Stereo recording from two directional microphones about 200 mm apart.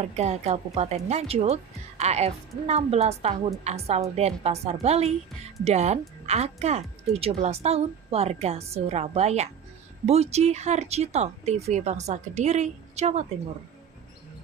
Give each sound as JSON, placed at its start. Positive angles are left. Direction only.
{"t": 0.1, "sound": "a woman's voice", "side_deg": -35}